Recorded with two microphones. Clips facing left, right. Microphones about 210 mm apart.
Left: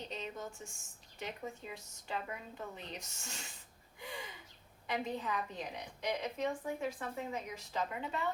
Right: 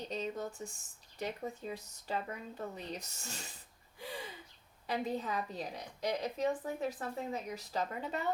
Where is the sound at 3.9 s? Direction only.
35° right (ahead or behind).